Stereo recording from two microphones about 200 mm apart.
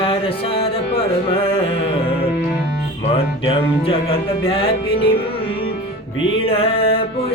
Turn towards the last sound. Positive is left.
turn(degrees=30)  # may be behind; listen again after turning